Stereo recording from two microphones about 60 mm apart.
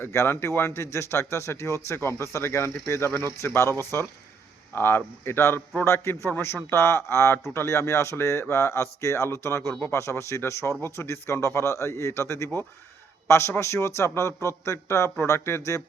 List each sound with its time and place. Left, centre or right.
0.0 s speech: left
4.7 s speech: left
13.2 s speech: left